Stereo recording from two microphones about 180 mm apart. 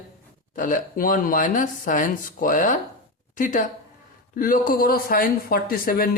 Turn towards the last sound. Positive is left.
turn(degrees=55)  # may be behind; listen again after turning